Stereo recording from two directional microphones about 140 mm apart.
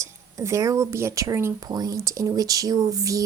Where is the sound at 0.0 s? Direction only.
20° right (ahead or behind).